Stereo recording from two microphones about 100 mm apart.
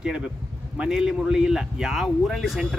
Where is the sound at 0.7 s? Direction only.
5° right (ahead or behind).